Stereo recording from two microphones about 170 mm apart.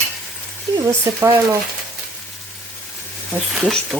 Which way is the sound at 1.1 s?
20° right (ahead or behind).